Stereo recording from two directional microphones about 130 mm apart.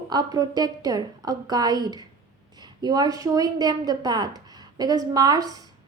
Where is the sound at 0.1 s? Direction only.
30° right (ahead or behind).